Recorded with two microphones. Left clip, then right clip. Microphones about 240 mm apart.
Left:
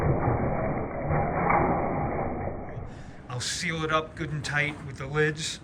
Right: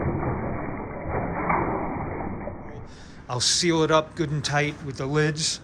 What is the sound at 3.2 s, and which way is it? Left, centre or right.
A man's voice, centre.